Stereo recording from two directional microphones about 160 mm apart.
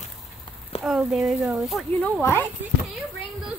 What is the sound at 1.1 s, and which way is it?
A child's voice, 5° right (ahead or behind).